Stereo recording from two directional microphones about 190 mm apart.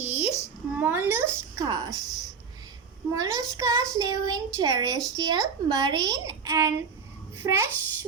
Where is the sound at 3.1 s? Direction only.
15° right (ahead or behind).